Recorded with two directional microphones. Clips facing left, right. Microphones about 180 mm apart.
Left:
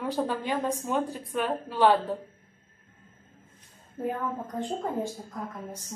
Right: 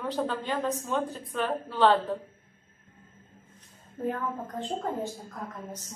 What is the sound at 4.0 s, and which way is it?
Speech, 10° left (ahead or behind).